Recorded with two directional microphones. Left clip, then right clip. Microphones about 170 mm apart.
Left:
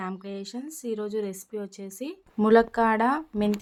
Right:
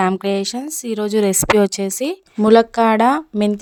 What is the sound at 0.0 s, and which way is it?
Speech, 90° right.